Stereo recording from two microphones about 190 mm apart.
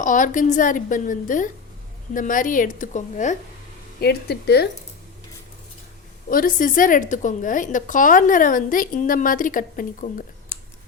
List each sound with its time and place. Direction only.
0.0 s a woman's voice: 45° left (ahead or behind)
4.0 s speech: 55° left (ahead or behind)
6.3 s a woman's voice: 45° left (ahead or behind)